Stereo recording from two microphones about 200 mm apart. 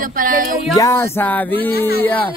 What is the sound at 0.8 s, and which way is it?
Music, 15° left (ahead or behind).